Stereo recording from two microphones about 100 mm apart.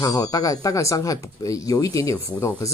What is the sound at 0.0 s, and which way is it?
Speech, 35° left (ahead or behind).